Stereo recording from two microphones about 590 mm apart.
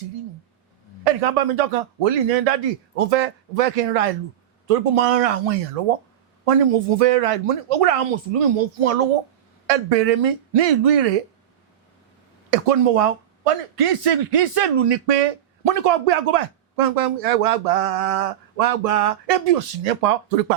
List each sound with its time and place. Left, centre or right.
1.0 s speech: right
12.5 s speech: right